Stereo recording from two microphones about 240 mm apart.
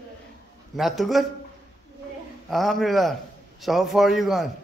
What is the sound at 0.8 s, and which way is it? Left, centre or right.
Speech, centre.